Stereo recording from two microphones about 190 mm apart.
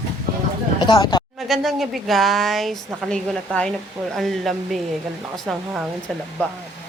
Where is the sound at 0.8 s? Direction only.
25° left (ahead or behind).